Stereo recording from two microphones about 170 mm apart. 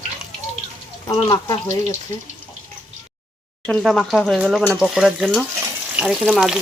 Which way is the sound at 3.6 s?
5° left (ahead or behind).